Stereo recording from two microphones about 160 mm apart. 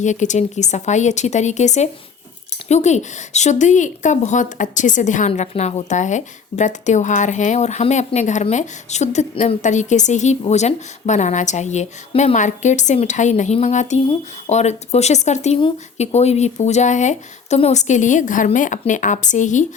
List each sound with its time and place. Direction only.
0.0 s speech: 50° left (ahead or behind)